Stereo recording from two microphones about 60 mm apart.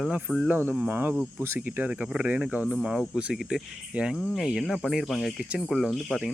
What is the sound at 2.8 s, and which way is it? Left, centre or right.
Speech, centre.